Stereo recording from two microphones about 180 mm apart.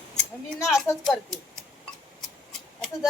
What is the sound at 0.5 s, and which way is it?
Speech, 15° left (ahead or behind).